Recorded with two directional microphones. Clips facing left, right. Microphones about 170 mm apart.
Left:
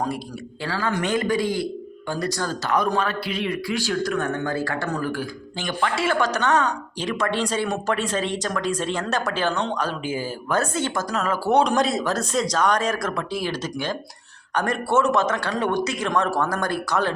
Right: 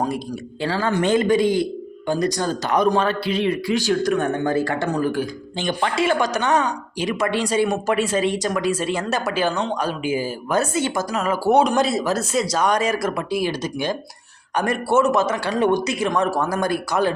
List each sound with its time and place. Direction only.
0.6 s a man's voice: 25° right (ahead or behind)